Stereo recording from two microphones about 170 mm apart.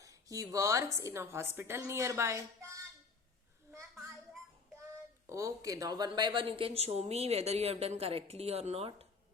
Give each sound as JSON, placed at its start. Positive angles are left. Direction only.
{"t": 0.0, "sound": "a woman's voice", "side_deg": -20}
{"t": 5.2, "sound": "speech", "side_deg": -20}